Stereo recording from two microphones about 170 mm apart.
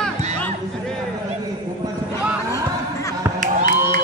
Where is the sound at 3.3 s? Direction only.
50° right (ahead or behind).